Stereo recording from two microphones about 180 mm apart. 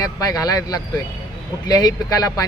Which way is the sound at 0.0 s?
20° left (ahead or behind).